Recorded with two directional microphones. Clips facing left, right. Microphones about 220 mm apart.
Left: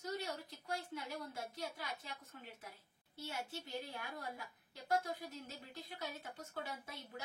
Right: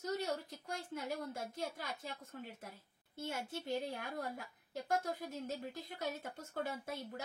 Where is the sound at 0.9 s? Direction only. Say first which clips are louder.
Right 4 dB; 45° right (ahead or behind).